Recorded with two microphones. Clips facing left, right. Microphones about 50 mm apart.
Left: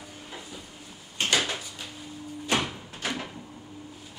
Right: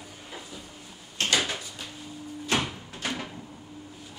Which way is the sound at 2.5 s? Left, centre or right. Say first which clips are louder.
Even; centre.